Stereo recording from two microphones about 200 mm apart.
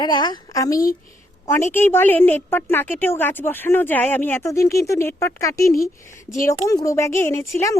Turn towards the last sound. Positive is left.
turn(degrees=15)  # may be behind; listen again after turning